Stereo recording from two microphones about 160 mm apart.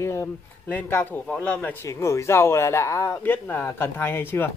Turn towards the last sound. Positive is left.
turn(degrees=15)  # may be behind; listen again after turning